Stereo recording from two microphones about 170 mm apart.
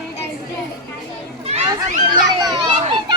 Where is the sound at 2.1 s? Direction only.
25° right (ahead or behind).